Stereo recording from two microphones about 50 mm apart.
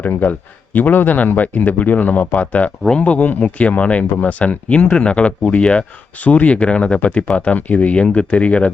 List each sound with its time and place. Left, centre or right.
0.2 s speech: left